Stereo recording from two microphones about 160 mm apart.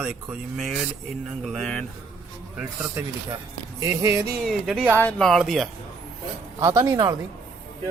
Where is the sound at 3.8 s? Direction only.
20° right (ahead or behind).